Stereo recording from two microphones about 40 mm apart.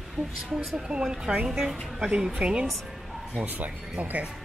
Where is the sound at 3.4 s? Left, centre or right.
Right.